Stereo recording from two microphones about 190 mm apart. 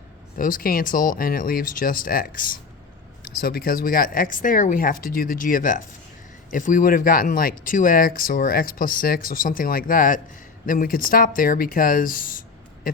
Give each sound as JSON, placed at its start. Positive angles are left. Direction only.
{"t": 0.3, "sound": "speech", "side_deg": 45}